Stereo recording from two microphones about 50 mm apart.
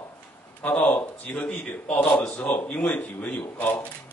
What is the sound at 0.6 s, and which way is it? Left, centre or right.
A man's voice, left.